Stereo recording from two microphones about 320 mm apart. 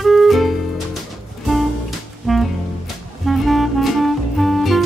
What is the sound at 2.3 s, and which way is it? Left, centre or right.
Music, centre.